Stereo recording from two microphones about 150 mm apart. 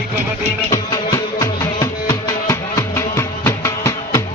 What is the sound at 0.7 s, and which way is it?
Music, 20° left (ahead or behind).